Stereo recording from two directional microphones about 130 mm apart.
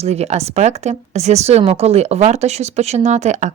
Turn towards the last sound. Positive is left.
turn(degrees=-65)  # may be behind; listen again after turning